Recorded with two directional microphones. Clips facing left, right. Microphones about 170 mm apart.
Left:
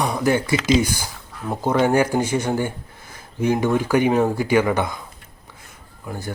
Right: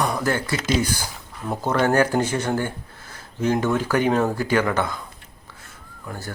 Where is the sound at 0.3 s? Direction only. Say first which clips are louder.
Left 5 dB; 15° left (ahead or behind).